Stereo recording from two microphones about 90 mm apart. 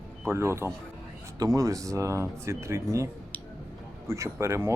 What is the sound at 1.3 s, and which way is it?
Speech, 40° right (ahead or behind).